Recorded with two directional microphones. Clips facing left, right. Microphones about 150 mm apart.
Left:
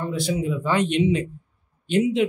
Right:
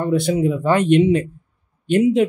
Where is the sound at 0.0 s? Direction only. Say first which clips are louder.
Right 7 dB; 55° right (ahead or behind).